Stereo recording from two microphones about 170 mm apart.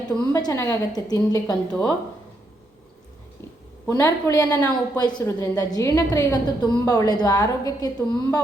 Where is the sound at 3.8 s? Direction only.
15° left (ahead or behind).